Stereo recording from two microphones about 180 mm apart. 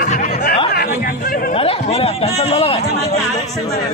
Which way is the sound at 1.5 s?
35° left (ahead or behind).